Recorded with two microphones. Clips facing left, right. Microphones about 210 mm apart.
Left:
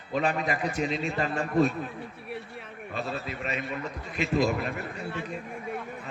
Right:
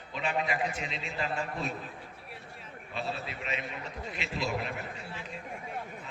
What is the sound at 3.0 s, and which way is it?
A man's voice, 45° left (ahead or behind).